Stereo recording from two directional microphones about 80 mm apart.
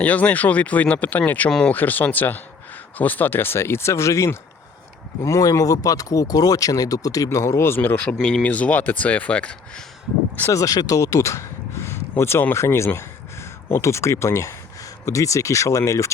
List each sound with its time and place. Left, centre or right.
0.0 s speech: centre
1.5 s speech: centre
1.7 s speech: left
7.9 s speech: centre
10.5 s speech: left